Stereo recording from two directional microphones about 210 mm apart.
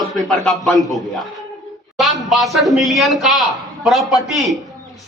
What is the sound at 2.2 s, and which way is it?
A woman's voice, centre (ahead or behind).